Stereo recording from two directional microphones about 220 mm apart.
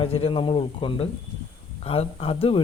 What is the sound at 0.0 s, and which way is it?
Speech, 25° left (ahead or behind).